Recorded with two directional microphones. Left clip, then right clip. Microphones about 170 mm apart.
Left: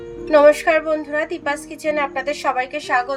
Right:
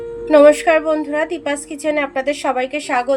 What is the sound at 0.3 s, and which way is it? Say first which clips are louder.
A woman's voice: right 3 dB; 30° right (ahead or behind).